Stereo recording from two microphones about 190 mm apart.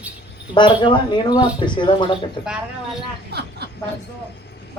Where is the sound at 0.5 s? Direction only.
25° left (ahead or behind).